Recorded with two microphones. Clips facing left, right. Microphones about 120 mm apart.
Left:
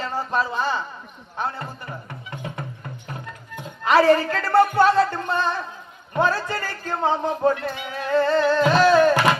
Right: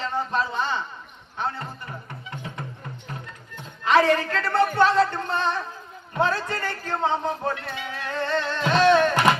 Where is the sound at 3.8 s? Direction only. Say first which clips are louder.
Left 3 dB; 35° left (ahead or behind).